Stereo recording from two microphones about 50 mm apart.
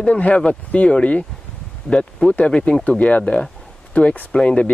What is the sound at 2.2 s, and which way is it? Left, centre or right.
Speech, left.